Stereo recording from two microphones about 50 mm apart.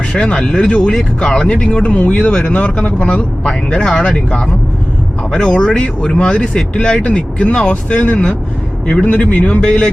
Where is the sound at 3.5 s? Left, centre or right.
Centre.